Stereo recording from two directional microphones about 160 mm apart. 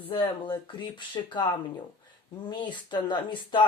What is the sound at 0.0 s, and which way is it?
Speech, 30° left (ahead or behind).